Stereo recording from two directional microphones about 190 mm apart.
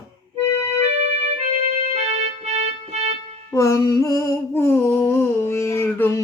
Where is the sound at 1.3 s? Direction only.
35° right (ahead or behind).